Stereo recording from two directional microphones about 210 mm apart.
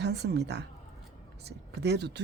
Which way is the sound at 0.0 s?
55° right (ahead or behind).